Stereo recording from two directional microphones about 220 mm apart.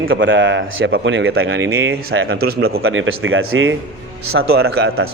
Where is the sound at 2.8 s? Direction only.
65° right (ahead or behind).